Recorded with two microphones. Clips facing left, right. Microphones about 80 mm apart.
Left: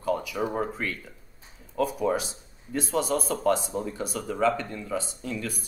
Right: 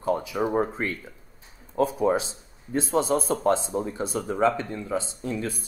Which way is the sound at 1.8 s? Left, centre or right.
Right.